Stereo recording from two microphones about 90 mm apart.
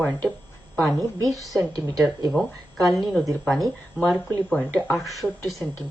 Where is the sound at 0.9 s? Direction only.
45° right (ahead or behind).